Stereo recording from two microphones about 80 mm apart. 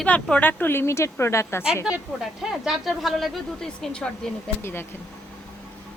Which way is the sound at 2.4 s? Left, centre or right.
Centre.